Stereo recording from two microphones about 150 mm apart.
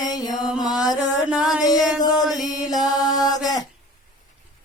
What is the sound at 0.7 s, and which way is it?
Mantra, 25° left (ahead or behind).